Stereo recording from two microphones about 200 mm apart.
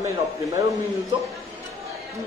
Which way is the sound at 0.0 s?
15° right (ahead or behind).